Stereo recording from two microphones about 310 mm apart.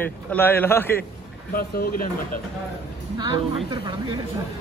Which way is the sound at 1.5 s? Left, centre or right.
Left.